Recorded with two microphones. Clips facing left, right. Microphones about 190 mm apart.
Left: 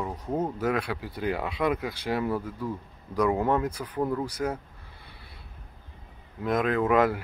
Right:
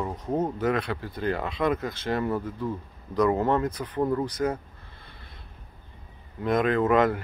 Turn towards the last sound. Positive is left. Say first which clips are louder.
# right 1 dB
turn(degrees=5)  # may be behind; listen again after turning